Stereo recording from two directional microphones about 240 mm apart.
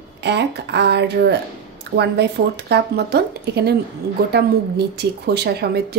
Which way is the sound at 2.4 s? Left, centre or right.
Right.